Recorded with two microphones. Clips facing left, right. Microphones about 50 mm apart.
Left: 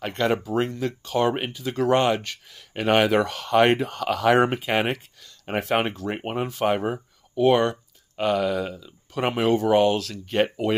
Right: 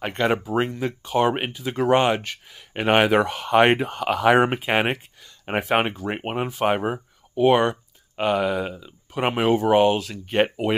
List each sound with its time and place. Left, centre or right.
0.0 s speech: right